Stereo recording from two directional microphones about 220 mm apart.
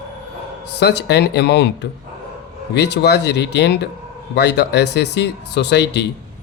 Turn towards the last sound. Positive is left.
turn(degrees=50)  # may be behind; listen again after turning